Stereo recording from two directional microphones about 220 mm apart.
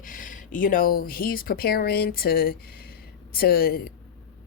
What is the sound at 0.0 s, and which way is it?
A woman's voice, 40° left (ahead or behind).